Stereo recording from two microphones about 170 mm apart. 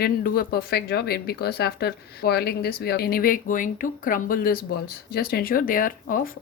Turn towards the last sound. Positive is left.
turn(degrees=55)  # may be behind; listen again after turning